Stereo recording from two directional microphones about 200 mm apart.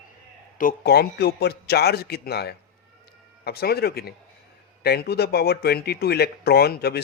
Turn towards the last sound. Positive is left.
turn(degrees=50)  # may be behind; listen again after turning